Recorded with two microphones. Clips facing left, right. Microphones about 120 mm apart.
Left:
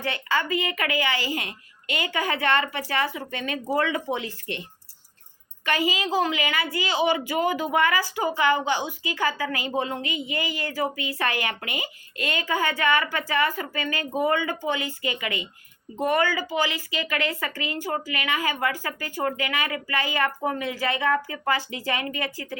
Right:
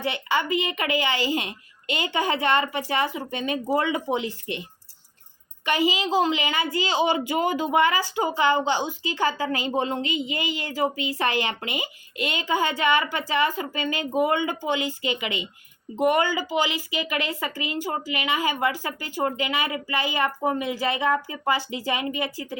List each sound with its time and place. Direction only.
0.0 s a woman's voice: 20° right (ahead or behind)
5.6 s a woman's voice: 20° right (ahead or behind)